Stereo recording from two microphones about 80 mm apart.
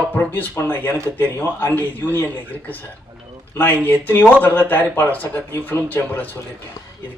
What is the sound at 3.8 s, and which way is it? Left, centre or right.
Speech, left.